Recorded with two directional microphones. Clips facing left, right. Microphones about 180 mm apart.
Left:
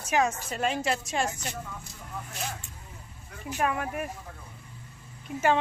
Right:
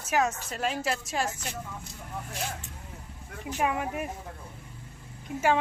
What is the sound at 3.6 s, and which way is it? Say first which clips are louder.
Speech: even; 15° right (ahead or behind).